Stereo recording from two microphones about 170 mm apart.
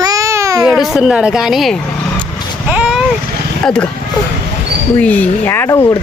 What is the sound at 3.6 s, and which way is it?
Speech, 5° left (ahead or behind).